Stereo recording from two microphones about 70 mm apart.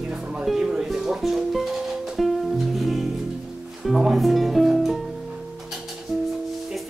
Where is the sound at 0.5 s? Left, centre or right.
Centre.